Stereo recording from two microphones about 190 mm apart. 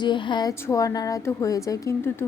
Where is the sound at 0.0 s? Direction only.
25° left (ahead or behind).